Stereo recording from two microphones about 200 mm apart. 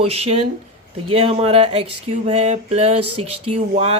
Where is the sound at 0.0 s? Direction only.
30° right (ahead or behind).